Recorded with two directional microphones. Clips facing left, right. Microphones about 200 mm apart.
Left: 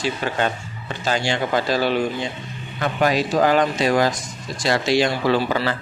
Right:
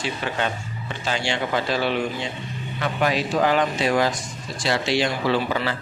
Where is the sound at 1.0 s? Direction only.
40° left (ahead or behind).